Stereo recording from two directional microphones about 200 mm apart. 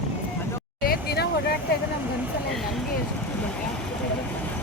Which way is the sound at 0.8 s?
50° left (ahead or behind).